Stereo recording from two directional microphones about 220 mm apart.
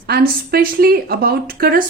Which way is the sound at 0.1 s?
45° right (ahead or behind).